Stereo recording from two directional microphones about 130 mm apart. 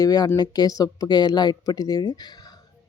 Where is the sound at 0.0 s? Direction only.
30° left (ahead or behind).